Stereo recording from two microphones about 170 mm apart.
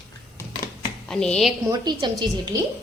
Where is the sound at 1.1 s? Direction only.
5° left (ahead or behind).